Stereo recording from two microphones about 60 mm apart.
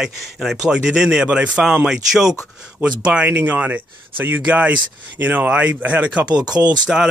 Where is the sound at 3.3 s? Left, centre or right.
Right.